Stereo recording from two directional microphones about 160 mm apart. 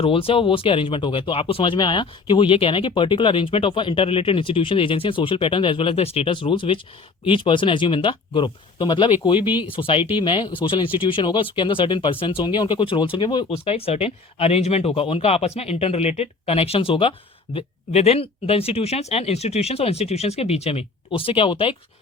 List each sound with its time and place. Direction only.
0.0 s speech: 35° left (ahead or behind)